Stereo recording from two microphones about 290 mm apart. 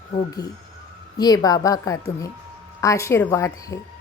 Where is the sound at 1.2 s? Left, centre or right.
Centre.